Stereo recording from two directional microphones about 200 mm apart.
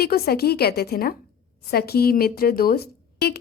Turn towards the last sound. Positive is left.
turn(degrees=50)  # may be behind; listen again after turning